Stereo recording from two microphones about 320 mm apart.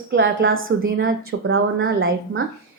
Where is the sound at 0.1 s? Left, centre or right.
Right.